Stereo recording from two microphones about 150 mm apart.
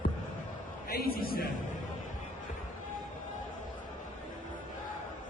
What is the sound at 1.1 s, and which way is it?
Speech, 85° left.